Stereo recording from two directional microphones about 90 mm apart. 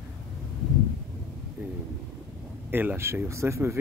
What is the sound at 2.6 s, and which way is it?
Speech, 25° right (ahead or behind).